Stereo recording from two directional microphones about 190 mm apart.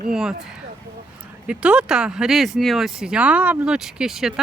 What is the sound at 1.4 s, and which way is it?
Speech, 5° right (ahead or behind).